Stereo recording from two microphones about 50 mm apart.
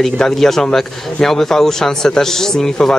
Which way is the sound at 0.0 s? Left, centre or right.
Centre.